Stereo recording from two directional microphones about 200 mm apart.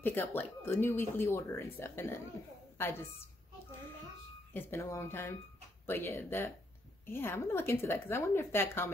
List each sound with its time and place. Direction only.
0.0 s speech: 10° left (ahead or behind)
4.6 s speech: 15° left (ahead or behind)